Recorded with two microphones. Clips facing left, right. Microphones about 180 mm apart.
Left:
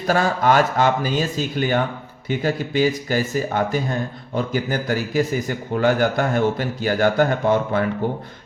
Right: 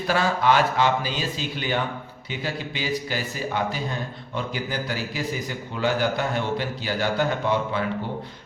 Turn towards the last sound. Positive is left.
turn(degrees=50)  # may be behind; listen again after turning